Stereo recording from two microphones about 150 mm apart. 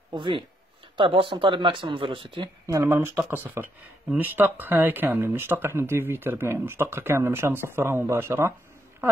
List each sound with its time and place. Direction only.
0.1 s speech: 30° right (ahead or behind)
2.6 s speech: 20° right (ahead or behind)